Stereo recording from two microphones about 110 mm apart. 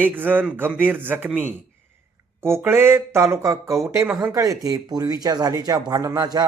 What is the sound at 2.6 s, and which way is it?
Speech, 20° right (ahead or behind).